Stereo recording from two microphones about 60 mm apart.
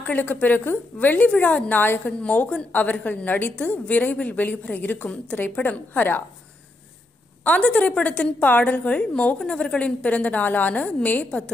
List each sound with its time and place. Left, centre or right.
0.0 s a woman's voice: left
7.6 s a woman's voice: centre